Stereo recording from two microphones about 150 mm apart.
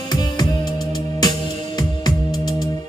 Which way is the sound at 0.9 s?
30° left (ahead or behind).